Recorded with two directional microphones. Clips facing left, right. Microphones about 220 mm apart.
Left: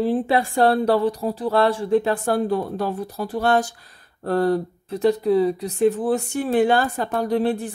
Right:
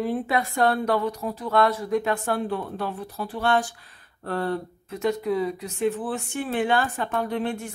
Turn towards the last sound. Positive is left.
turn(degrees=35)  # may be behind; listen again after turning